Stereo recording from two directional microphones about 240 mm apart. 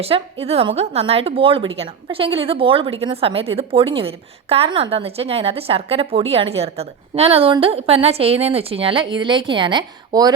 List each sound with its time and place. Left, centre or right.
0.0 s a woman's voice: right